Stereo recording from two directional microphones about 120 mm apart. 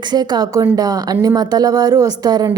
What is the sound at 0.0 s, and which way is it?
A woman's voice, 35° right (ahead or behind).